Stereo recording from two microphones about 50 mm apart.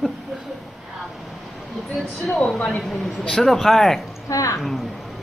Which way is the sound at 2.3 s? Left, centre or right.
Centre.